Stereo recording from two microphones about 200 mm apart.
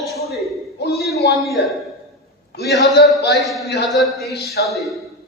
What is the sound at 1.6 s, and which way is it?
Speech, 60° left (ahead or behind).